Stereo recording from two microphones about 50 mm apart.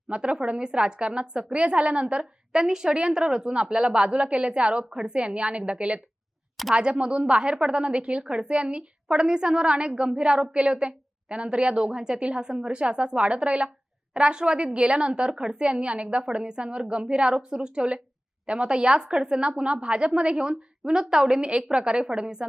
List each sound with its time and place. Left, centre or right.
0.1 s a woman's voice: right